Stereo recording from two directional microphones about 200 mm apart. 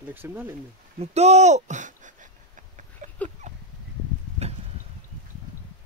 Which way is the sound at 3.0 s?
40° right (ahead or behind).